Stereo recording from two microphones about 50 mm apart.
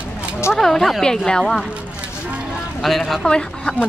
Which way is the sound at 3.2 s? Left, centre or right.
Centre.